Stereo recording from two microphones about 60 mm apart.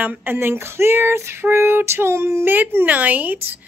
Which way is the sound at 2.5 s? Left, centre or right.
Right.